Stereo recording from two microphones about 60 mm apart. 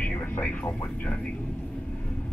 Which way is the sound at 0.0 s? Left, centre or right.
Left.